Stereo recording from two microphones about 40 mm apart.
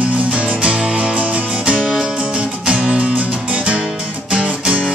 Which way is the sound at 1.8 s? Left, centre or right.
Centre.